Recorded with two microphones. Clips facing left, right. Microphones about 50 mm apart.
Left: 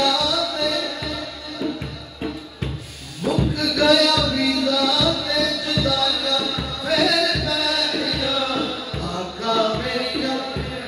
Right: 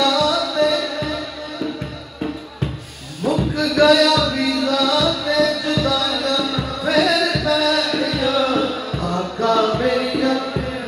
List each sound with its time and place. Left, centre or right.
0.0 s music: right
3.3 s music: right